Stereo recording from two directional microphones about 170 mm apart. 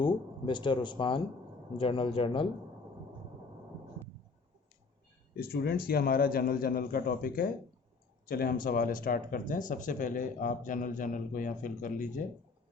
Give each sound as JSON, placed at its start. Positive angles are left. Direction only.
{"t": 0.0, "sound": "speech", "side_deg": 30}
{"t": 5.4, "sound": "a man's voice", "side_deg": 65}